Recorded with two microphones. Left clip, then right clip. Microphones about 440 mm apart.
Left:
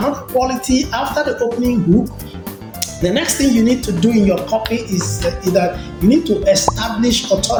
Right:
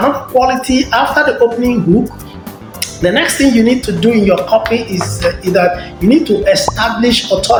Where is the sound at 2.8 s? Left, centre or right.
Left.